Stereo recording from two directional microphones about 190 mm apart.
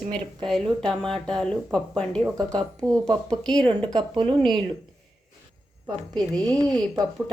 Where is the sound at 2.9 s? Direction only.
20° right (ahead or behind).